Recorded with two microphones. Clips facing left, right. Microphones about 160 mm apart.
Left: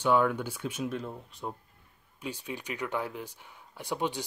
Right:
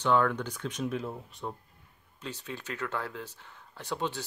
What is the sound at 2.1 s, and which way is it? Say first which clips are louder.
Speech: left 2 dB; 10° left (ahead or behind).